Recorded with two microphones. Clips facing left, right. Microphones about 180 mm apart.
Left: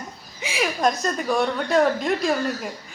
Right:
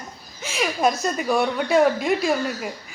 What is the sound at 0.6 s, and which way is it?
A woman's voice, 5° right (ahead or behind).